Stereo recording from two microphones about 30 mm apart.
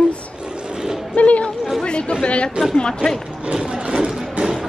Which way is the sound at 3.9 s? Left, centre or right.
Right.